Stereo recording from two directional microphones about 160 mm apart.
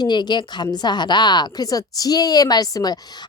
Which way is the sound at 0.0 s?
25° left (ahead or behind).